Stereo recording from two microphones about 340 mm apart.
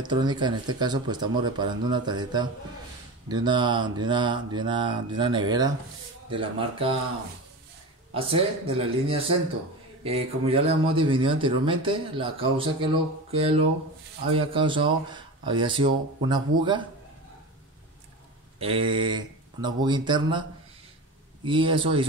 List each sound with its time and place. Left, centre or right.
0.0 s speech: centre
8.1 s speech: centre
18.6 s speech: centre
21.5 s speech: centre